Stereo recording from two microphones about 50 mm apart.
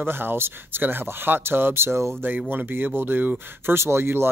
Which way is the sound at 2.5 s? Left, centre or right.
Right.